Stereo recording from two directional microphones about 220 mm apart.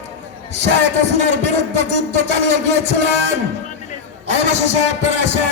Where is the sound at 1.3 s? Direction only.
30° left (ahead or behind).